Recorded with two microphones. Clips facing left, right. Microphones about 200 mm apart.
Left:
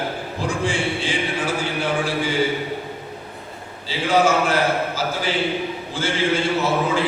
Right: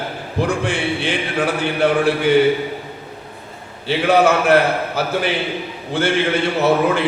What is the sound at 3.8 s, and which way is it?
A man's voice, 60° right (ahead or behind).